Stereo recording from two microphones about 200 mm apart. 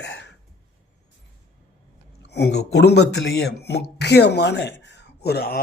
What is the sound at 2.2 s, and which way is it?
Speech, 55° left (ahead or behind).